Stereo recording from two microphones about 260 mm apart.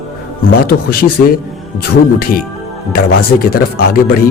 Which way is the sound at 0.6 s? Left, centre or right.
Left.